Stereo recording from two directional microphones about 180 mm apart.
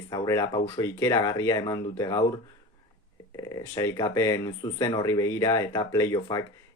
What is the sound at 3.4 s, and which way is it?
Speech, 20° left (ahead or behind).